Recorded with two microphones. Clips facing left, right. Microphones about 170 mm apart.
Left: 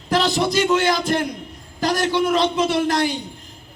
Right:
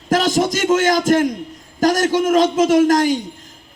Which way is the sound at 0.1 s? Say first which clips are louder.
Right 3 dB; 45° right (ahead or behind).